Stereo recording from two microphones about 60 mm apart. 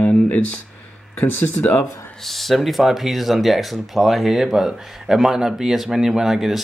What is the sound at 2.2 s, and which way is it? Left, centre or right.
Speech, centre.